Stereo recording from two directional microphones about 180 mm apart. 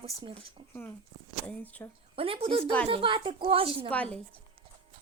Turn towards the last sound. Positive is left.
turn(degrees=5)  # may be behind; listen again after turning